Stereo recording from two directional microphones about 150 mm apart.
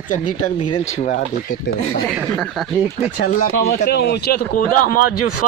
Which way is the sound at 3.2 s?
85° left.